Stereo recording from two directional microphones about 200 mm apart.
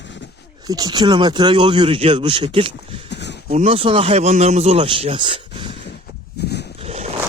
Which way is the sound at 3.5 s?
30° right (ahead or behind).